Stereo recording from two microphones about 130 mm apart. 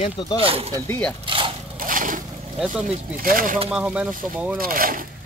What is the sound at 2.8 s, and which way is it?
Speech, 90° right.